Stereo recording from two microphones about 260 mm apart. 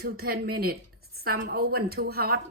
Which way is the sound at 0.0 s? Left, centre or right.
Right.